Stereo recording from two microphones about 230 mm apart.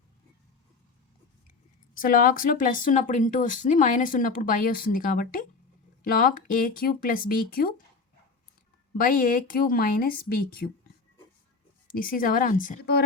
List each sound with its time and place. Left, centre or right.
2.0 s speech: left
9.0 s speech: left
11.9 s speech: left